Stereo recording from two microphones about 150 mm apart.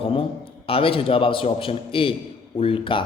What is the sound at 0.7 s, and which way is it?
A man's voice, 40° left (ahead or behind).